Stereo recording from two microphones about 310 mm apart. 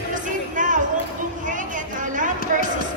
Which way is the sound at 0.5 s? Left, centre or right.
Right.